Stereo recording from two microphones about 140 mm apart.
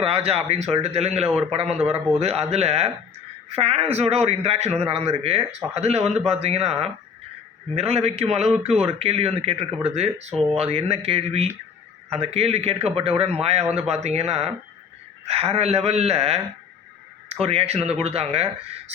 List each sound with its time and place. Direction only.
0.0 s a man's voice: 45° right (ahead or behind)
17.4 s a man's voice: 45° right (ahead or behind)